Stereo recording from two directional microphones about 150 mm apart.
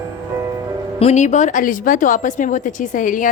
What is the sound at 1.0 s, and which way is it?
A woman's voice, 50° left (ahead or behind).